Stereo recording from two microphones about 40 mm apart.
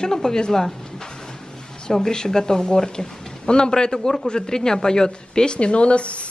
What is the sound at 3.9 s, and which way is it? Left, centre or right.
A woman's voice, centre.